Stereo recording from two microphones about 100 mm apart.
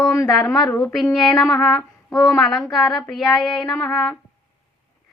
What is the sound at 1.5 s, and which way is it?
Child singing, 5° left (ahead or behind).